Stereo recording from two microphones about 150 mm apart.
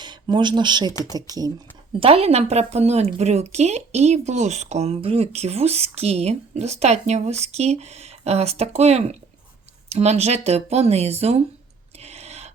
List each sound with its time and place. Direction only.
0.0 s speech: 30° right (ahead or behind)
2.0 s a woman's voice: 40° right (ahead or behind)
11.9 s a sound: 45° right (ahead or behind)